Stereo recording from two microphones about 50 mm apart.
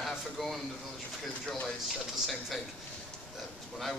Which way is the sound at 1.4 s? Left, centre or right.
Left.